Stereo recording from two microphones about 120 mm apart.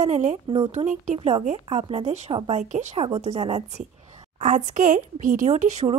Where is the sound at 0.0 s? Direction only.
70° right (ahead or behind).